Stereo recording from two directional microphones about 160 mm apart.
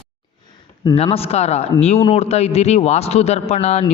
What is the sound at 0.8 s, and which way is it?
A man's voice, 30° left (ahead or behind).